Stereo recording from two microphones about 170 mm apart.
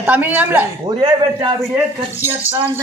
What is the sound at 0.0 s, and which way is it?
Speech, 10° right (ahead or behind).